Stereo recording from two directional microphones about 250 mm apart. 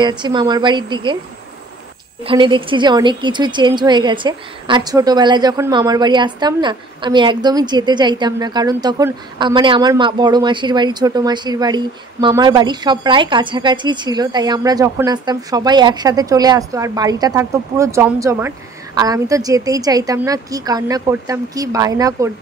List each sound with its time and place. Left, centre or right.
0.0 s a woman's voice: centre
2.2 s a woman's voice: centre